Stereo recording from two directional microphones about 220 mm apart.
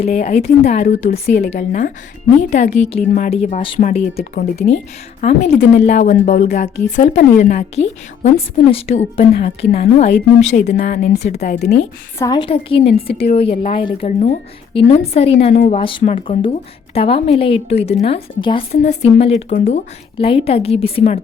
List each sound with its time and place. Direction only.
0.0 s a woman's voice: 30° left (ahead or behind)
12.2 s a woman's voice: 20° left (ahead or behind); by 15.8 s 35° left (ahead or behind)
15.8 s a woman's voice: 25° left (ahead or behind)